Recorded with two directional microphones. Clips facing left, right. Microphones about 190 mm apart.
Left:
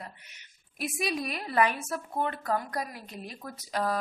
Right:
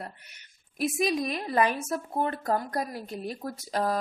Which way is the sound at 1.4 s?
25° right (ahead or behind).